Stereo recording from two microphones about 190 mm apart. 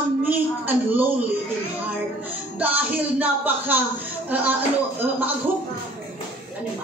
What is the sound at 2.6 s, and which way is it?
A woman's voice, 10° right (ahead or behind).